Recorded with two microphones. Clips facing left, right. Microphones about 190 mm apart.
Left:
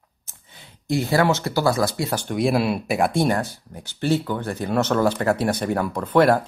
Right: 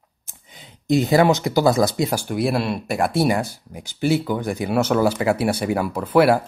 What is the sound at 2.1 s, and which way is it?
Speech, 5° right (ahead or behind).